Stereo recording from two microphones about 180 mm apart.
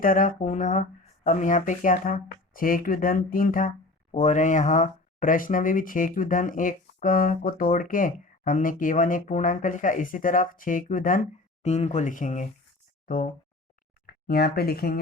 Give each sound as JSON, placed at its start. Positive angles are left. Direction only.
{"t": 0.0, "sound": "speech", "side_deg": 50}